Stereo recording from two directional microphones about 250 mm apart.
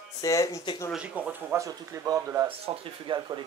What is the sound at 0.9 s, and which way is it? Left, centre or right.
A man's voice, centre.